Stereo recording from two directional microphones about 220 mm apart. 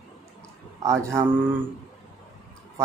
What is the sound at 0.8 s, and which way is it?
Speech, 15° right (ahead or behind).